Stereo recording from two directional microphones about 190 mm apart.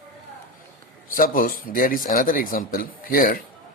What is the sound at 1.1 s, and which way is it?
Speech, 45° left (ahead or behind).